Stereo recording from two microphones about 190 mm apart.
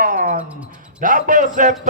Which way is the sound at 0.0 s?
45° right (ahead or behind).